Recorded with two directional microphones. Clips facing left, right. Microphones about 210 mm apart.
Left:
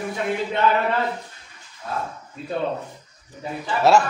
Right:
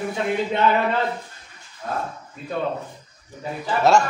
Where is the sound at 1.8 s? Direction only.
40° right (ahead or behind).